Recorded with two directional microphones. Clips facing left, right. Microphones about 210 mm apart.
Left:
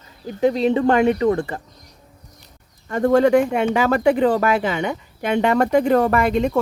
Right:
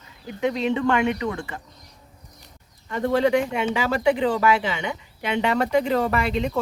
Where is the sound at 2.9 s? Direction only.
50° left (ahead or behind).